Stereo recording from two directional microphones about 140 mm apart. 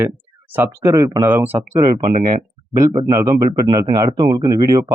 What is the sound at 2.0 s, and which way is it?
Speech, 65° right (ahead or behind).